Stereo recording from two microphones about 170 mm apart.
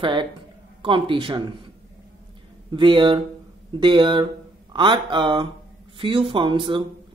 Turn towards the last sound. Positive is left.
turn(degrees=-30)  # may be behind; listen again after turning